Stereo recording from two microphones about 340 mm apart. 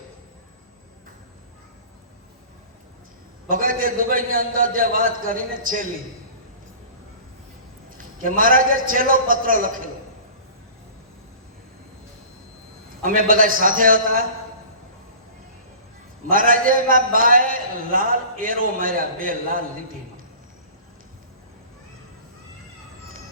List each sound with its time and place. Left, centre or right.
3.5 s a man's voice: right
7.9 s a man's voice: right
13.0 s a man's voice: right
16.3 s a man's voice: right